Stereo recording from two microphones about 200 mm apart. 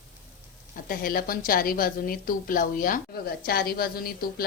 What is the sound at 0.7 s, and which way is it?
A woman's voice, 45° left (ahead or behind).